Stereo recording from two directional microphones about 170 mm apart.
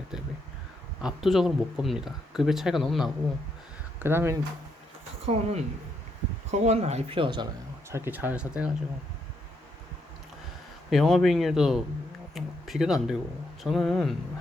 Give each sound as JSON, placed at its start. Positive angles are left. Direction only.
{"t": 1.0, "sound": "speech", "side_deg": 0}
{"t": 4.0, "sound": "speech", "side_deg": -15}
{"t": 5.2, "sound": "speech", "side_deg": -40}
{"t": 7.9, "sound": "speech", "side_deg": -15}
{"t": 10.8, "sound": "speech", "side_deg": 0}